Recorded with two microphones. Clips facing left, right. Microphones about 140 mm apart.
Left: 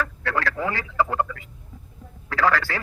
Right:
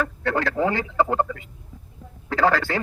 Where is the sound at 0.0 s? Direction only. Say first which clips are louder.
Right 2 dB; 25° right (ahead or behind).